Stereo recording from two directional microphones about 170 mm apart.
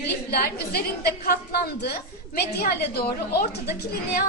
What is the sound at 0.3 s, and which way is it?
A woman's voice, 65° left (ahead or behind).